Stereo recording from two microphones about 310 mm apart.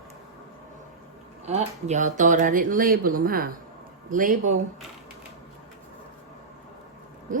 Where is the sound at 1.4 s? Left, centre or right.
Right.